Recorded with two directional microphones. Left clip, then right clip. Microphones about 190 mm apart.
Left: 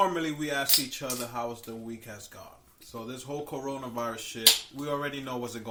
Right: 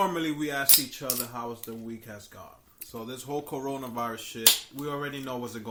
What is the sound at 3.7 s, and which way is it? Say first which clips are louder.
Speech: left 1 dB; 45° right (ahead or behind).